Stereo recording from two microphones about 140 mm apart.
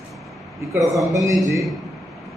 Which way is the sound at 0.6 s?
20° right (ahead or behind).